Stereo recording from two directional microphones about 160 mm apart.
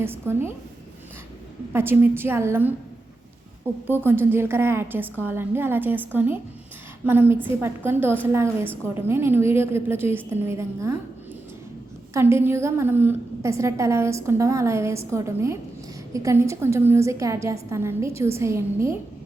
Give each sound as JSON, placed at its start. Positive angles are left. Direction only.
{"t": 0.0, "sound": "a woman's voice", "side_deg": -15}
{"t": 1.7, "sound": "a woman's voice", "side_deg": -15}
{"t": 3.8, "sound": "a woman's voice", "side_deg": -15}
{"t": 12.1, "sound": "a woman's voice", "side_deg": -15}